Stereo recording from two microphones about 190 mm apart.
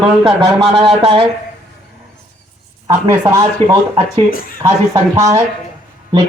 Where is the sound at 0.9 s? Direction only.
30° right (ahead or behind).